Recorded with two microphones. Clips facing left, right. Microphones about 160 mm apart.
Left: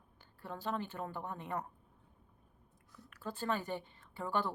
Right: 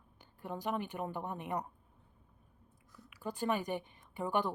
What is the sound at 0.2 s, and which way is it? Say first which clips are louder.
A woman's voice: right 3 dB; 15° right (ahead or behind).